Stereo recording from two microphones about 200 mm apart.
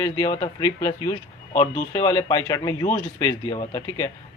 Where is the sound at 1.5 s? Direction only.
40° left (ahead or behind).